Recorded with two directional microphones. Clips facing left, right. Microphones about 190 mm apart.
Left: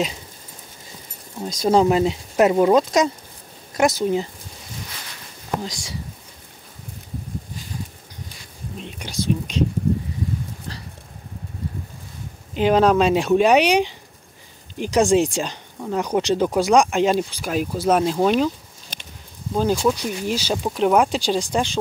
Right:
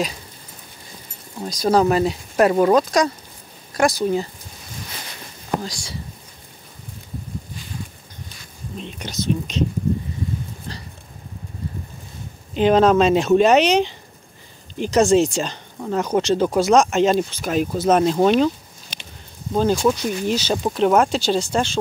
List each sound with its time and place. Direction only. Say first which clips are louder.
1.4 s speech: even; 25° left (ahead or behind)
5.6 s speech: even; 20° left (ahead or behind)
8.7 s speech: even; 10° left (ahead or behind)
12.5 s speech: right 2 dB; 10° left (ahead or behind)
19.5 s speech: right 2 dB; 10° left (ahead or behind)